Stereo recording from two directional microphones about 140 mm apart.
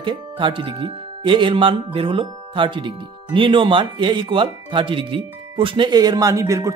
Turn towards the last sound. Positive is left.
turn(degrees=-20)  # may be behind; listen again after turning